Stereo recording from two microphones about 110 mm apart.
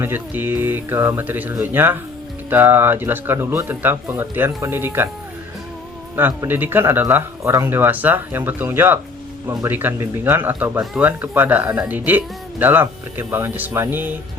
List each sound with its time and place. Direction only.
0.0 s speech: 20° right (ahead or behind)
6.1 s speech: 20° right (ahead or behind)